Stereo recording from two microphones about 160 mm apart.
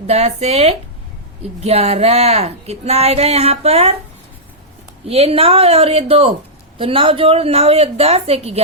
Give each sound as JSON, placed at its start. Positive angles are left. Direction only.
{"t": 0.1, "sound": "speech", "side_deg": -40}
{"t": 5.0, "sound": "speech", "side_deg": -35}